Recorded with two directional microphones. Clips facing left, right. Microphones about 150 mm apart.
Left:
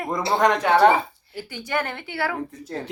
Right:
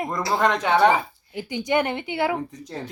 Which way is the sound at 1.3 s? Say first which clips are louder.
Right 5 dB; 15° right (ahead or behind).